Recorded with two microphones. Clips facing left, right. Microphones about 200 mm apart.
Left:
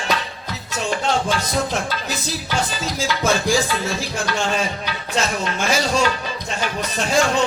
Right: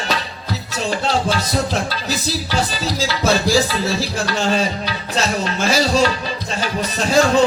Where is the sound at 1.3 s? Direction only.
35° right (ahead or behind).